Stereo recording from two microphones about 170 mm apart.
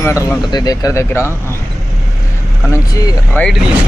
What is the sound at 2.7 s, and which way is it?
Speech, 15° left (ahead or behind).